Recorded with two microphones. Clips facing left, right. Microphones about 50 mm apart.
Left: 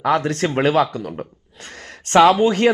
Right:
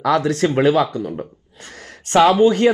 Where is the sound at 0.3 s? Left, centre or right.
Left.